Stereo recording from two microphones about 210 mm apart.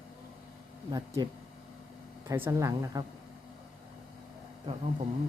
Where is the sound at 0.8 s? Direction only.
20° right (ahead or behind).